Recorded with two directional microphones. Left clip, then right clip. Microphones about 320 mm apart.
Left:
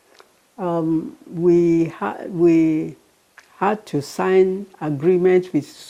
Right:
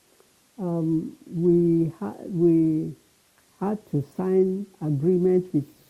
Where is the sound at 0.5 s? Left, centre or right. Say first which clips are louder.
Left 6 dB; centre.